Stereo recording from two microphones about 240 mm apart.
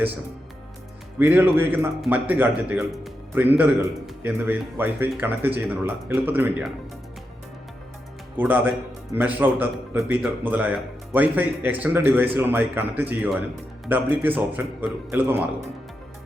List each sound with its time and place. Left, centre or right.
1.2 s speech: centre
8.4 s speech: centre